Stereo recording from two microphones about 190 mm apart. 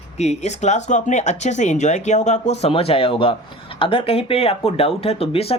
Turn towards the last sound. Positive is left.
turn(degrees=30)  # may be behind; listen again after turning